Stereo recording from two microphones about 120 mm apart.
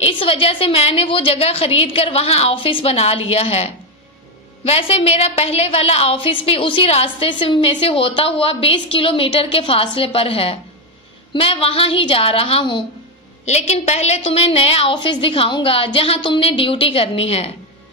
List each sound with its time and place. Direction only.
0.0 s a woman's voice: 45° left (ahead or behind)
13.5 s a woman's voice: 65° left (ahead or behind)